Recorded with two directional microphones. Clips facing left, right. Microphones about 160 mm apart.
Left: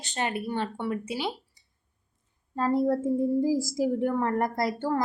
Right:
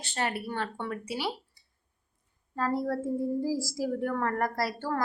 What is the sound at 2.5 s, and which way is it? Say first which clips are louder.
Speech: left 5 dB; 20° left (ahead or behind).